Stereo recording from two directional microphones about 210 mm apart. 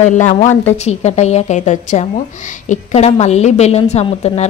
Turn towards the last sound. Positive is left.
turn(degrees=30)  # may be behind; listen again after turning